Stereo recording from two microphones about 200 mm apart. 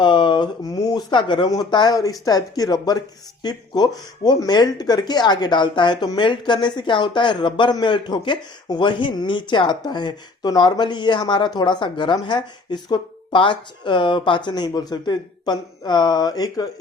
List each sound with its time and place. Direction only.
0.0 s speech: 25° left (ahead or behind)